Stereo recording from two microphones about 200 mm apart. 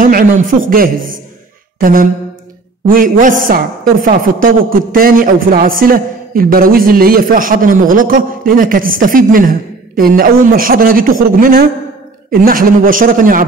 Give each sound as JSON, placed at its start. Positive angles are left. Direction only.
{"t": 0.0, "sound": "a woman's voice", "side_deg": -45}